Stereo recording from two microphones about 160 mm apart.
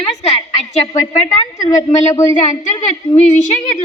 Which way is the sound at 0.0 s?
40° left (ahead or behind).